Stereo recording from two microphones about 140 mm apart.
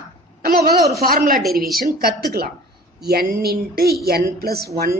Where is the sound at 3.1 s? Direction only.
90° right.